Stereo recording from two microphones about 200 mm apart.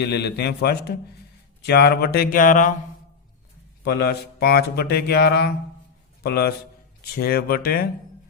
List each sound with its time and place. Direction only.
0.0 s a man's voice: 55° left (ahead or behind)
3.8 s speech: 55° left (ahead or behind)